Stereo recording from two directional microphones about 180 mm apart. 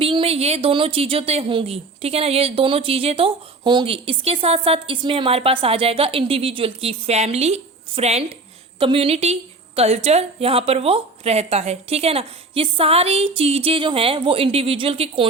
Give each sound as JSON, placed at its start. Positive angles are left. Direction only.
{"t": 0.0, "sound": "a woman's voice", "side_deg": -30}